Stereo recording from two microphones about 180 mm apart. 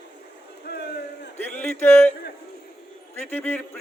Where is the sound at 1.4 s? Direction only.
10° left (ahead or behind).